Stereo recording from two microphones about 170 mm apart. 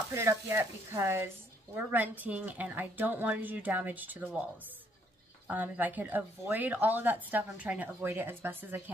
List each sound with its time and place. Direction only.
0.1 s speech: 15° right (ahead or behind)